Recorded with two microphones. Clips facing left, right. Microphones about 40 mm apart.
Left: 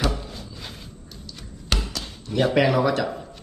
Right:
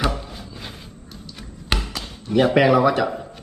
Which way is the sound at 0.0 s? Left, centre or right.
Centre.